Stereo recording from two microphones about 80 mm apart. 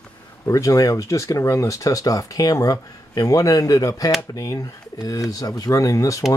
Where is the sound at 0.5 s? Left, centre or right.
Left.